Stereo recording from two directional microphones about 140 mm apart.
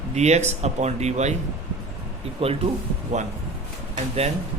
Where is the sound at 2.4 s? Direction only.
40° right (ahead or behind).